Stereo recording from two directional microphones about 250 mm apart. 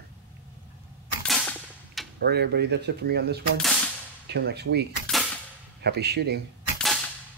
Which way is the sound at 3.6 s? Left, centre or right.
Centre.